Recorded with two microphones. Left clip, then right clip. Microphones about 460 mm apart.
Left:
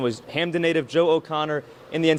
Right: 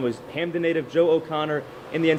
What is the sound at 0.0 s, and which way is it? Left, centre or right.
A man's voice, left.